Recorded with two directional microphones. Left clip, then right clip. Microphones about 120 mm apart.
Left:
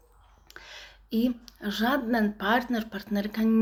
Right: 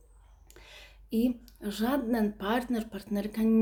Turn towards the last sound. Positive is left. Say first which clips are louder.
# left 2 dB
turn(degrees=-20)  # may be behind; listen again after turning